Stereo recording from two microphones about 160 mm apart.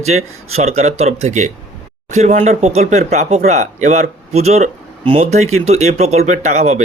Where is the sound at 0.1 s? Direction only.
45° right (ahead or behind).